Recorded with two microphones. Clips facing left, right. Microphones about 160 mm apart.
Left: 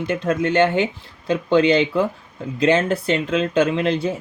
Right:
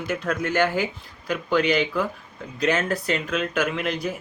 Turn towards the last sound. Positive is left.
turn(degrees=25)  # may be behind; listen again after turning